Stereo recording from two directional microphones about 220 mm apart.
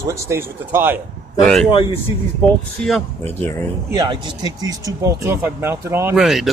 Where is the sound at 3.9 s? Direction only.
20° right (ahead or behind).